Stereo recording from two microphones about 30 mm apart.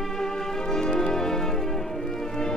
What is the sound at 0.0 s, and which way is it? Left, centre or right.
Music, centre.